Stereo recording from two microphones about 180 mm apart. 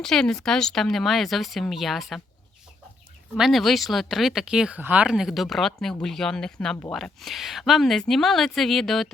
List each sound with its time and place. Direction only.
0.0 s speech: centre (ahead or behind)
3.3 s speech: centre (ahead or behind)